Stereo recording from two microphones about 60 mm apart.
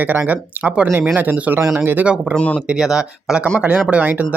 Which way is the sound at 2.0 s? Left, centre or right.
Right.